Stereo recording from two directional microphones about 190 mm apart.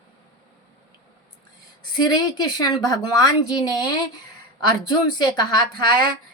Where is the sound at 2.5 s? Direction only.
20° left (ahead or behind).